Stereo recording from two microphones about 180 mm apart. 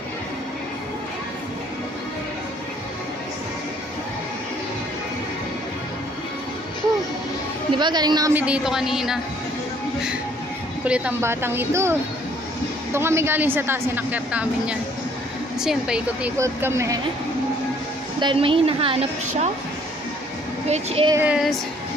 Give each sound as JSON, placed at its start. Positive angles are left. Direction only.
{"t": 7.8, "sound": "a woman's voice", "side_deg": -25}
{"t": 8.4, "sound": "speech", "side_deg": -5}
{"t": 10.8, "sound": "a woman's voice", "side_deg": -10}
{"t": 18.2, "sound": "a woman's voice", "side_deg": -30}
{"t": 20.6, "sound": "a woman's voice", "side_deg": -35}
{"t": 21.1, "sound": "a woman's voice", "side_deg": -10}